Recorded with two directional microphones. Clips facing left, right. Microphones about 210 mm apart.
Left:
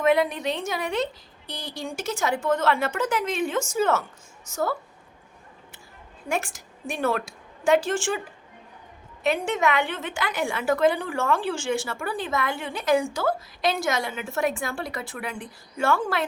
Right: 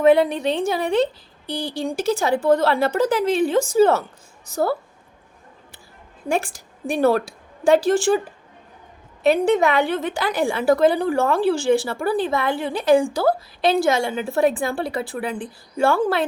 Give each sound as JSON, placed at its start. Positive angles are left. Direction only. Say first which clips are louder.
{"t": 0.0, "sound": "a woman's voice", "louder": "right 6 dB", "side_deg": -30}
{"t": 6.2, "sound": "a woman's voice", "louder": "right 5 dB", "side_deg": -30}
{"t": 9.2, "sound": "a woman's voice", "louder": "right 7 dB", "side_deg": -35}